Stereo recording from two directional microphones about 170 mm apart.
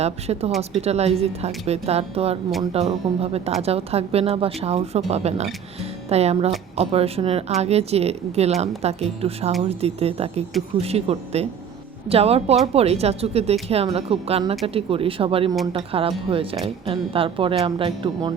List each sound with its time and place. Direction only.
0.0 s speech: 40° right (ahead or behind)